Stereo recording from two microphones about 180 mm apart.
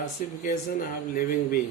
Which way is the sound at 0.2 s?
50° left (ahead or behind).